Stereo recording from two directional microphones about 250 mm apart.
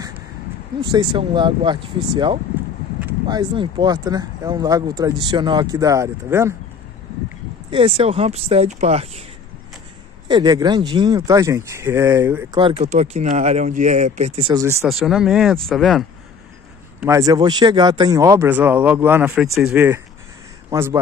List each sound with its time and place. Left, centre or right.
0.9 s speech: centre
7.7 s speech: right
10.2 s speech: centre
12.5 s speech: right
14.9 s speech: centre
17.0 s speech: centre